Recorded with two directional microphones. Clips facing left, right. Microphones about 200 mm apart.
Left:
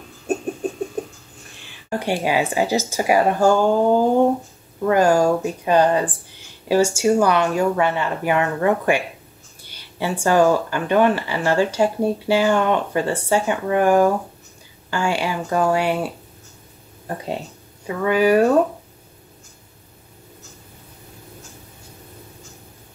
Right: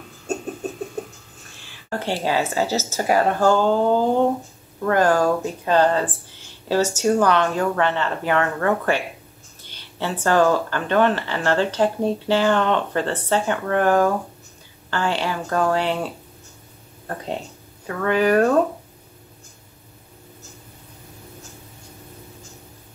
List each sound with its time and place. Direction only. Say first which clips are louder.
0.3 s a sound: left 4 dB; 15° left (ahead or behind)
1.9 s speech: left 2 dB; 15° left (ahead or behind)
17.8 s speech: left 2 dB; 10° left (ahead or behind)